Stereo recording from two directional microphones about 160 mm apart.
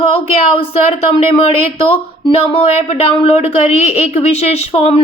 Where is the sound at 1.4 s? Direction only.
35° left (ahead or behind).